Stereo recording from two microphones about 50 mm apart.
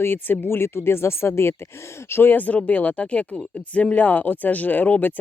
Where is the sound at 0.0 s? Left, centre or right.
Left.